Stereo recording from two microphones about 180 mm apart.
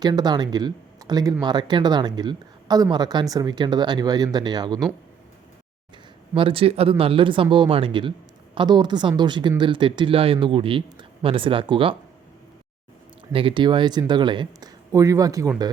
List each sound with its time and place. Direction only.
0.0 s speech: 20° right (ahead or behind)
6.3 s speech: 30° right (ahead or behind)
13.3 s speech: 30° right (ahead or behind)